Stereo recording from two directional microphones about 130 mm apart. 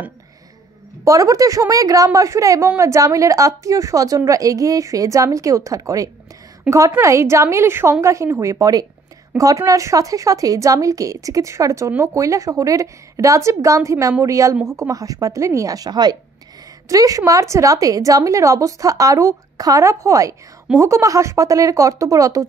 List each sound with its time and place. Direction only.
1.0 s a woman's voice: 25° right (ahead or behind)
6.7 s a woman's voice: 5° right (ahead or behind)
7.0 s a woman's voice: 20° right (ahead or behind)